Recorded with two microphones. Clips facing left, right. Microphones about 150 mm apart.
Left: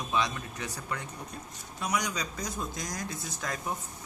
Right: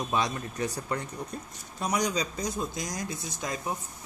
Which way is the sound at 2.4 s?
20° right (ahead or behind).